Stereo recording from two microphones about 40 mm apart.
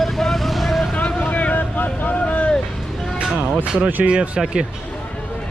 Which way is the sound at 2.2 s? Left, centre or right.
Left.